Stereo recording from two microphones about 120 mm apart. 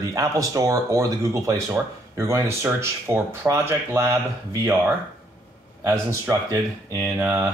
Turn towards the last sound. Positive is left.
turn(degrees=-25)  # may be behind; listen again after turning